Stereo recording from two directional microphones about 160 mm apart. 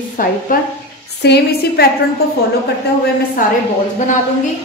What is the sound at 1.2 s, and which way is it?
Speech, 85° left.